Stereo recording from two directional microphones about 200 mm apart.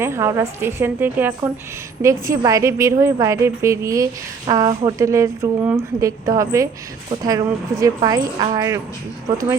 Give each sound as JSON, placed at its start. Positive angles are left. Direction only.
{"t": 0.0, "sound": "a woman's voice", "side_deg": -10}